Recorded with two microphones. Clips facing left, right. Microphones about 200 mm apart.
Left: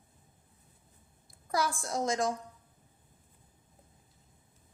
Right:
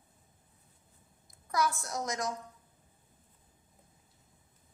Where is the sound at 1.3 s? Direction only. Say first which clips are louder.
Even; 30° left (ahead or behind).